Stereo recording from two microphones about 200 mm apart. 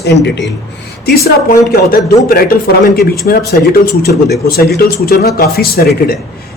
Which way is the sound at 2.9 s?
50° left (ahead or behind).